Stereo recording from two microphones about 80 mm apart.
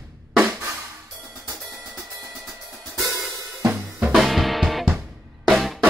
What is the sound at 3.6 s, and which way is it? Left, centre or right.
Drum kit, centre.